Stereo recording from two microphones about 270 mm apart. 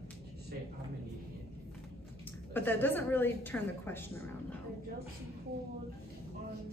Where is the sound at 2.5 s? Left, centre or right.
Centre.